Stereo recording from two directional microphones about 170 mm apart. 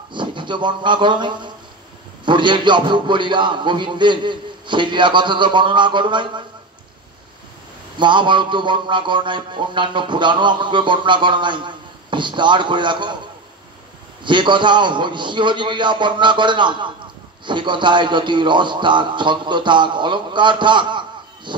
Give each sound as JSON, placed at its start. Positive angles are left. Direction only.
{"t": 0.1, "sound": "speech", "side_deg": -30}
{"t": 2.2, "sound": "music", "side_deg": -30}
{"t": 8.0, "sound": "music", "side_deg": -30}
{"t": 14.2, "sound": "music", "side_deg": -30}